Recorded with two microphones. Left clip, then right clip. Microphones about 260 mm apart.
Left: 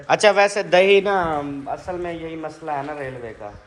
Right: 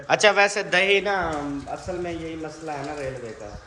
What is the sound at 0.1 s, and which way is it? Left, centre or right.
Speech, centre.